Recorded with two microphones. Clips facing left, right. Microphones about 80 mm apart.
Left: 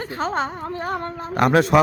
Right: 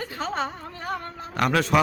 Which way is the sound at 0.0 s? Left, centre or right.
Left.